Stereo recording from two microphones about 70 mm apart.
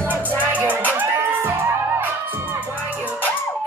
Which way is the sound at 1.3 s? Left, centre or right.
Right.